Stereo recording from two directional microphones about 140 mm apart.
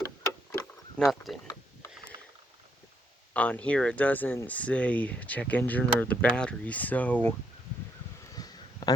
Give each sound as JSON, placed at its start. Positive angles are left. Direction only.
{"t": 1.0, "sound": "speech", "side_deg": 10}
{"t": 3.3, "sound": "speech", "side_deg": 10}
{"t": 8.4, "sound": "a sound", "side_deg": 25}